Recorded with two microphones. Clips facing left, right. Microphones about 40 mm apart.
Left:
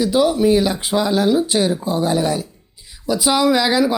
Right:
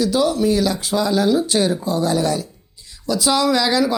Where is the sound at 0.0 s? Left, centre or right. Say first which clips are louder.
Left 2 dB; centre.